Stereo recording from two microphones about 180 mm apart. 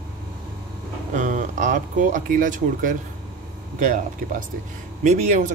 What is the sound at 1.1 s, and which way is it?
Speech, 45° right (ahead or behind).